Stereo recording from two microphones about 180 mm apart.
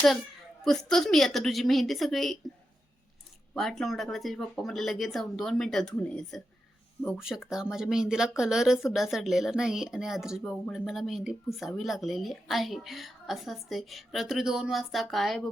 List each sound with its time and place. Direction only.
0.6 s a woman's voice: 5° left (ahead or behind)
3.5 s a woman's voice: centre (ahead or behind)